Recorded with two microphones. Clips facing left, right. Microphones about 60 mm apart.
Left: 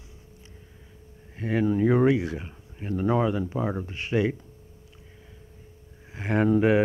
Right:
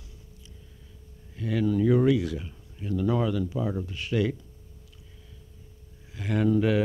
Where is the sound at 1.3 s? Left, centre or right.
Left.